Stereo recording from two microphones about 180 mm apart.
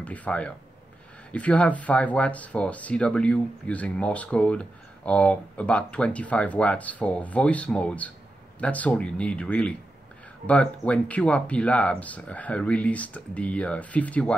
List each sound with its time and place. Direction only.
0.0 s speech: 10° left (ahead or behind)